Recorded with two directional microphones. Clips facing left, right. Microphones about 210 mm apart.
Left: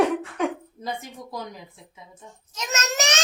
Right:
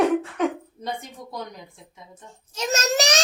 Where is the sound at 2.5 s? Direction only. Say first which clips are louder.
Right 5 dB; 35° right (ahead or behind).